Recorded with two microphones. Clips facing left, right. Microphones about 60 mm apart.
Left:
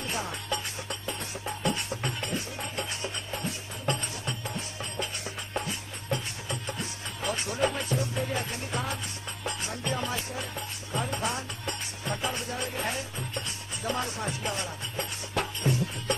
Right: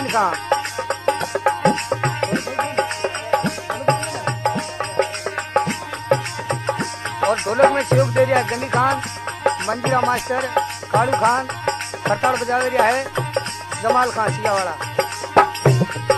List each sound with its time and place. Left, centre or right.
0.0 s music: right